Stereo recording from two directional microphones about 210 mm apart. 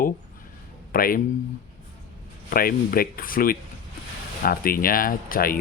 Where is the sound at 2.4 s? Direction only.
45° left (ahead or behind).